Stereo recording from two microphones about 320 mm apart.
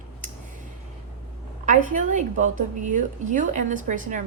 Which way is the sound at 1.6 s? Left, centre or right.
Right.